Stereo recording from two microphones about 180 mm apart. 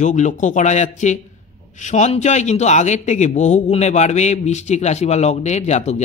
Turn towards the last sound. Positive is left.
turn(degrees=40)  # may be behind; listen again after turning